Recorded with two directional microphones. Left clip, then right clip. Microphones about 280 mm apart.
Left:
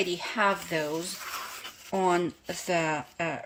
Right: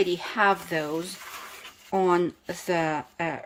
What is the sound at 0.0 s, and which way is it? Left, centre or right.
Speech, centre.